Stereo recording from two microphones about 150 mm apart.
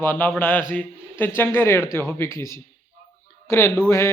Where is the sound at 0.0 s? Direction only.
10° left (ahead or behind).